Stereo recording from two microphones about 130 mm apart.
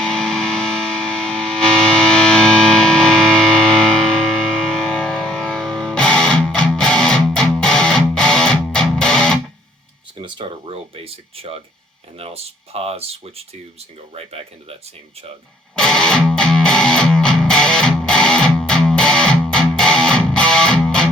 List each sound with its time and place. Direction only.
0.0 s music: 5° left (ahead or behind)
10.2 s a sound: 40° right (ahead or behind)
12.1 s speech: 50° right (ahead or behind)
15.8 s music: 5° left (ahead or behind)